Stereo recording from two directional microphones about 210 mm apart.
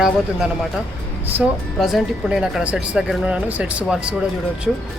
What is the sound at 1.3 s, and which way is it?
Speech, centre (ahead or behind).